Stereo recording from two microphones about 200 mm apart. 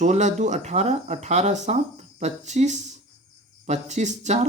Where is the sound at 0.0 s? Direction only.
35° right (ahead or behind).